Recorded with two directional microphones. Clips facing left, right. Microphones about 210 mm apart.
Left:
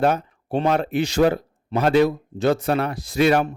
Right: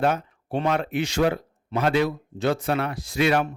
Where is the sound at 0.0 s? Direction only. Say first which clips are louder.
Left 3 dB; 35° left (ahead or behind).